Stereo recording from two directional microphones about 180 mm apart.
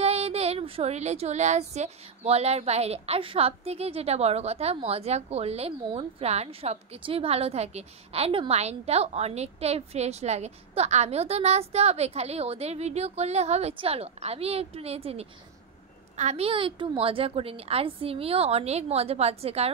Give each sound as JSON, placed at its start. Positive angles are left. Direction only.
{"t": 0.0, "sound": "speech", "side_deg": -35}